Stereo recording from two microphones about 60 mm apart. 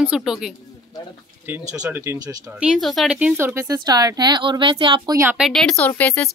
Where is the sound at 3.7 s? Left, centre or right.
Right.